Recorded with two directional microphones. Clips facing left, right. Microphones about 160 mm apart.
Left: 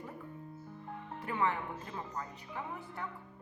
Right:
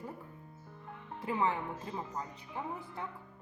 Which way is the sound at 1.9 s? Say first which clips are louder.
Right 2 dB; 20° right (ahead or behind).